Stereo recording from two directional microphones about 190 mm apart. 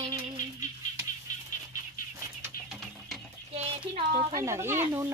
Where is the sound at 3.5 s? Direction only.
40° right (ahead or behind).